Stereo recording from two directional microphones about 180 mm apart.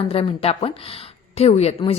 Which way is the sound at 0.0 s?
30° left (ahead or behind).